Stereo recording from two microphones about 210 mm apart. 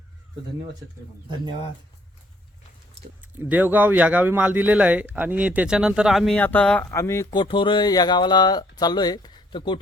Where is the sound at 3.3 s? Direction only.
10° right (ahead or behind).